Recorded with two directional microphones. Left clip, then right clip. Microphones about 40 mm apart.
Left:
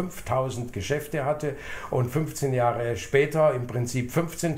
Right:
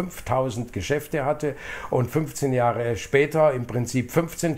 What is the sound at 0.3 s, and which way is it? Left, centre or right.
Speech, right.